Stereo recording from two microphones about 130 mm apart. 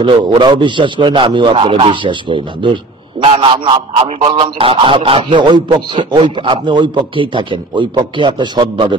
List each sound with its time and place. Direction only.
0.0 s a man's voice: 35° right (ahead or behind)